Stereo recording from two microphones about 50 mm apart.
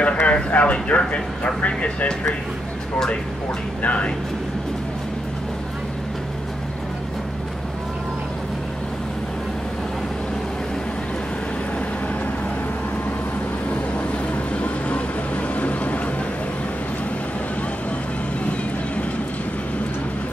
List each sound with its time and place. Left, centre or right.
0.0 s speech: left
3.8 s speech: left
13.7 s vehicle: left
15.5 s a sound: left